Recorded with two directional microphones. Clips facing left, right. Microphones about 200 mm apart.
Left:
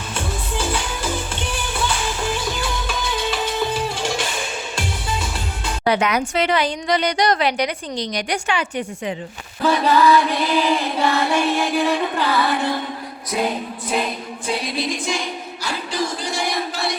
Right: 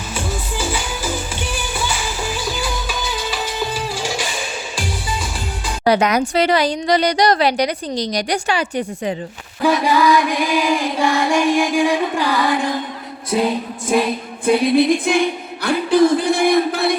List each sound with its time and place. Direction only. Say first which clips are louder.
0.1 s music: right 1 dB; 5° right (ahead or behind)
5.8 s speech: right 4 dB; 40° right (ahead or behind)
9.6 s female singing: right 1 dB; 10° right (ahead or behind)
13.3 s speech: right 4 dB; 30° right (ahead or behind)
14.4 s music: right 11 dB; 55° right (ahead or behind)